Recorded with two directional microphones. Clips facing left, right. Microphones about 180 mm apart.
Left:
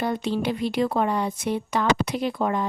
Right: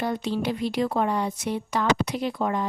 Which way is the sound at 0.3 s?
60° left (ahead or behind).